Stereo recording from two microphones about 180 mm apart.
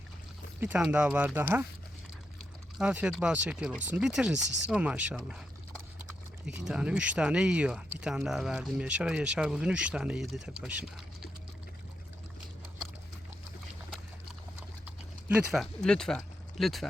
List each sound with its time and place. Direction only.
0.6 s speech: 10° right (ahead or behind)
2.7 s speech: 5° right (ahead or behind)
15.3 s speech: centre (ahead or behind)